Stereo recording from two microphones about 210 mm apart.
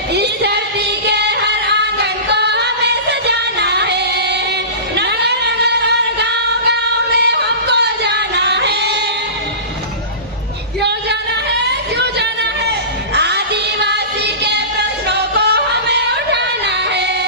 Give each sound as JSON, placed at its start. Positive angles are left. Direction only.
{"t": 0.1, "sound": "singing", "side_deg": -55}
{"t": 10.8, "sound": "female singing", "side_deg": -55}
{"t": 11.6, "sound": "a sound", "side_deg": -55}
{"t": 13.1, "sound": "music", "side_deg": -55}
{"t": 15.1, "sound": "yodeling", "side_deg": -55}